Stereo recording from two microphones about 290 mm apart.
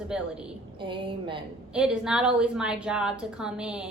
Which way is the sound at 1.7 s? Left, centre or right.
Centre.